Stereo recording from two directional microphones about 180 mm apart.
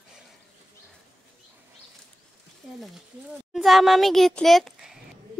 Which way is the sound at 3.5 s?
Centre (ahead or behind).